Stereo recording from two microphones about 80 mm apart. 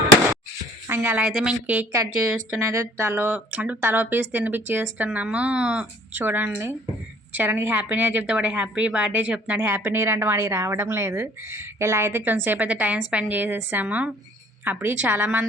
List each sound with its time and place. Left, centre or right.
0.9 s a sound: right
1.3 s speech: centre
1.6 s a woman's voice: right